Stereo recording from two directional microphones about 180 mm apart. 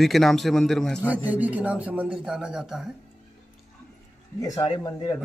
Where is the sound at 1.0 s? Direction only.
10° right (ahead or behind).